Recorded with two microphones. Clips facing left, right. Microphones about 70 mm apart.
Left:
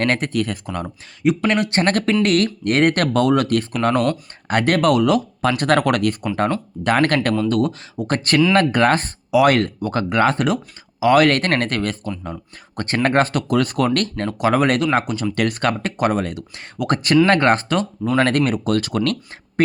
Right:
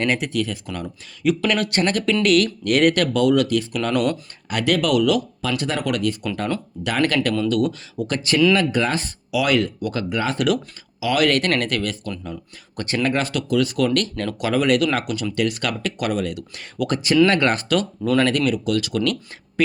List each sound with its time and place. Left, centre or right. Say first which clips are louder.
0.0 s speech: left 2 dB; left
1.2 s speech: left 2 dB; left
1.8 s speech: left 2 dB; left
6.2 s speech: left 4 dB; left
8.1 s speech: left 2 dB; left
10.3 s speech: even; left
11.0 s speech: left 5 dB; left
14.3 s speech: left 5 dB; left
14.5 s speech: even; left
16.9 s speech: left 2 dB; left
18.2 s speech: left 3 dB; left